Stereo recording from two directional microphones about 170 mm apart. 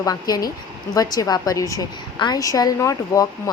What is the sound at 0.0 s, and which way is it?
Speech, 20° left (ahead or behind).